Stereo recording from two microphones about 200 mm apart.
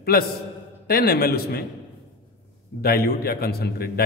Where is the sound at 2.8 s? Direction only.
50° left (ahead or behind).